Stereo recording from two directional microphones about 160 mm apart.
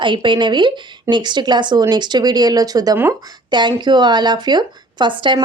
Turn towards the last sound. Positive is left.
turn(degrees=-30)  # may be behind; listen again after turning